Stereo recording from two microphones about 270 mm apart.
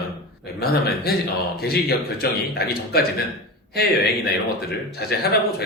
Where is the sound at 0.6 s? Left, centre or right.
Left.